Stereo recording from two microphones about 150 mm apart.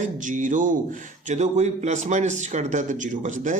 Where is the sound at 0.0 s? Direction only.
60° right (ahead or behind).